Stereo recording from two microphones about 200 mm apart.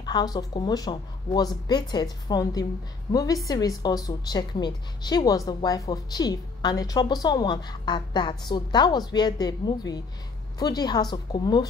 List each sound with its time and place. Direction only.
0.0 s a woman's voice: 20° left (ahead or behind)